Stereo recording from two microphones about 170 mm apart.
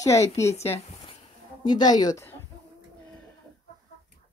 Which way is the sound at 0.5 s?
35° left (ahead or behind).